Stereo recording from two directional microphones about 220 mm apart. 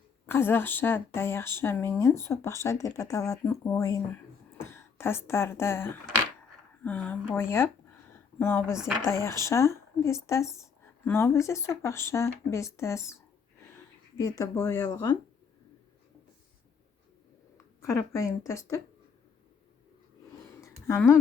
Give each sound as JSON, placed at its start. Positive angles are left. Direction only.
{"t": 0.3, "sound": "speech", "side_deg": 10}
{"t": 8.1, "sound": "a sound", "side_deg": 10}
{"t": 9.0, "sound": "speech", "side_deg": 10}
{"t": 14.2, "sound": "speech", "side_deg": 15}
{"t": 17.7, "sound": "speech", "side_deg": 10}
{"t": 20.6, "sound": "a sound", "side_deg": 10}